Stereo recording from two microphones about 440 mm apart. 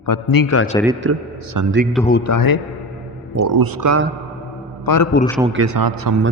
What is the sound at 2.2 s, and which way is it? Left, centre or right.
Speech, left.